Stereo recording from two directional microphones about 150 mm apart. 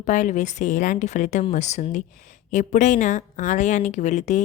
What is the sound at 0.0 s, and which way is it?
A woman's voice, 55° left (ahead or behind).